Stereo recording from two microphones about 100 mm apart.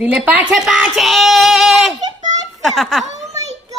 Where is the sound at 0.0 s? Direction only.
15° right (ahead or behind).